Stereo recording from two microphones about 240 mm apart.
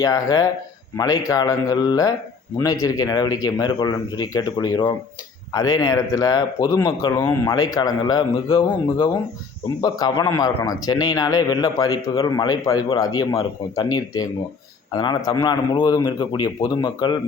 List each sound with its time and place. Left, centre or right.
0.0 s a man's voice: centre